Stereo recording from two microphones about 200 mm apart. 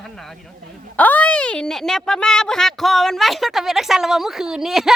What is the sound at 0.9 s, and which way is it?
Speech, 10° left (ahead or behind).